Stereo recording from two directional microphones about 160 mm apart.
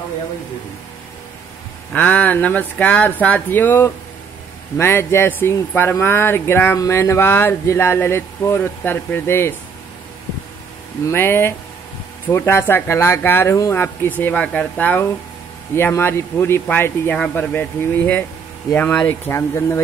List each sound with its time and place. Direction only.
2.0 s speech: 10° left (ahead or behind)
11.1 s speech: 15° left (ahead or behind)